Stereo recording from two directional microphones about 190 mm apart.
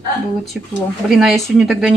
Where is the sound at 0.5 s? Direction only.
5° right (ahead or behind).